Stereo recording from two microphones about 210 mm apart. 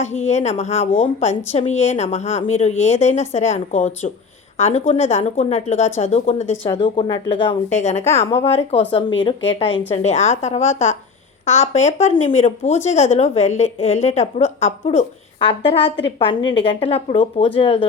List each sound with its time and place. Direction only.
0.0 s a woman's voice: 35° left (ahead or behind)
7.7 s a woman's voice: 35° left (ahead or behind)